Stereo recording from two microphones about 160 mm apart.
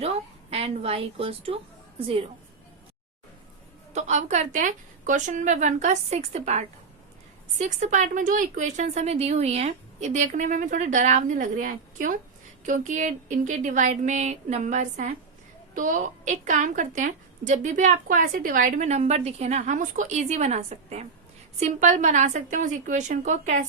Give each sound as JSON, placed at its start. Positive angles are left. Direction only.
{"t": 0.0, "sound": "a woman's voice", "side_deg": -40}
{"t": 3.9, "sound": "a woman's voice", "side_deg": -45}